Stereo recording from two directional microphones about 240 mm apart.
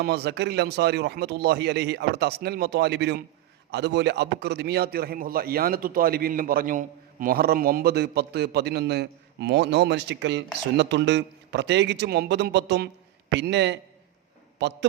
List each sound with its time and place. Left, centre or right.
0.0 s a man's voice: right